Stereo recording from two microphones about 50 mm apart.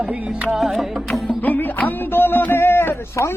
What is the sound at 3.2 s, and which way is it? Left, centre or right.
Speech, left.